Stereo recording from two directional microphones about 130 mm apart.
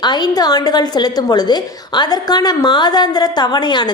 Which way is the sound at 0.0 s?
35° left (ahead or behind).